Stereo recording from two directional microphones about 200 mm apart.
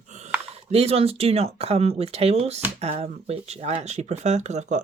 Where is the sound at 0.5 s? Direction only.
30° right (ahead or behind).